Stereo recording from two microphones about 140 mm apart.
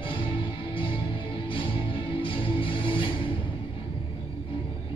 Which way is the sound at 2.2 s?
40° left (ahead or behind).